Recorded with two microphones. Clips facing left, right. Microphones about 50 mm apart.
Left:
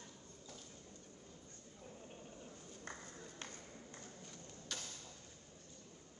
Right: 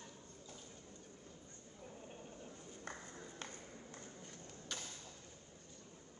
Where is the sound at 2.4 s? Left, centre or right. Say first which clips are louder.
Right 2 dB; right.